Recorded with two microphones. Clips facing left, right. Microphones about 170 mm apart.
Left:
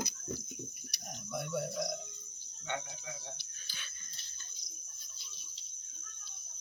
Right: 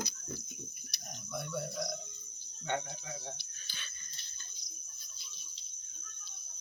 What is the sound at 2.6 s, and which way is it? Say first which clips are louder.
Cricket: right 3 dB; 40° right (ahead or behind).